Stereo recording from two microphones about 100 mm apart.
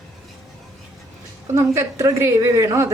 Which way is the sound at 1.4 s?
30° right (ahead or behind).